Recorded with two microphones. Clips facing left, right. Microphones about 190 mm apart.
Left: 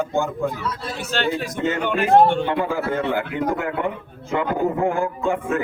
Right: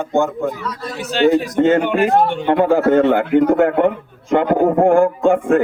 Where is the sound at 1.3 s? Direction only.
55° right (ahead or behind).